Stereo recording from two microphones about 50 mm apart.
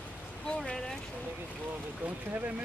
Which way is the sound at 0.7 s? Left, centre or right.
Centre.